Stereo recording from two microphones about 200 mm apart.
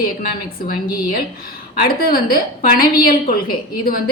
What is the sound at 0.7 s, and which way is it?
A woman's voice, 45° left (ahead or behind).